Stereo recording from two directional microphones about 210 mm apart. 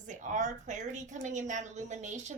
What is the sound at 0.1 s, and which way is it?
A woman's voice, 35° right (ahead or behind).